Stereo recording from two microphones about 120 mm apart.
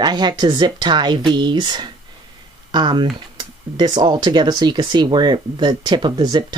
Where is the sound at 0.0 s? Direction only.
35° right (ahead or behind).